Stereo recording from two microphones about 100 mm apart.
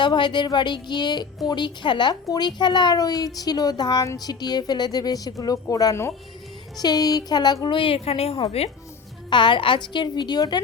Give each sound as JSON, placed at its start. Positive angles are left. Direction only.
{"t": 0.0, "sound": "a woman's voice", "side_deg": 50}
{"t": 4.0, "sound": "a woman's voice", "side_deg": 30}
{"t": 4.3, "sound": "a woman's voice", "side_deg": 45}
{"t": 6.7, "sound": "a woman's voice", "side_deg": 40}
{"t": 9.3, "sound": "speech", "side_deg": 55}